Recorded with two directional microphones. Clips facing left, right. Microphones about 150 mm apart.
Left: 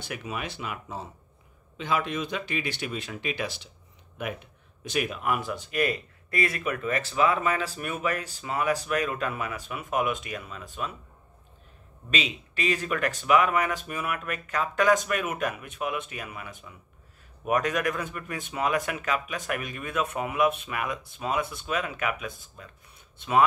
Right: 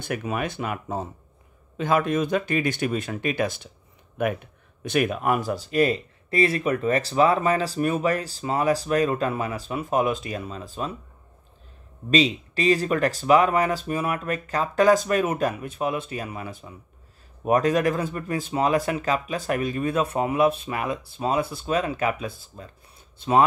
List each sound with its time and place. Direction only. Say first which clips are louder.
0.0 s speech: right 7 dB; 50° right (ahead or behind); by 11.0 s 30° right (ahead or behind)
12.1 s speech: right 10 dB; 35° right (ahead or behind)